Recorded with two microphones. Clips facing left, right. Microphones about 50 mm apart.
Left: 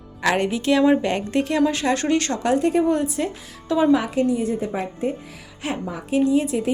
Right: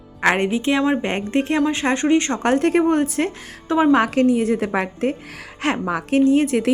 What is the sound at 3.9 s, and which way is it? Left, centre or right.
A woman's voice, right.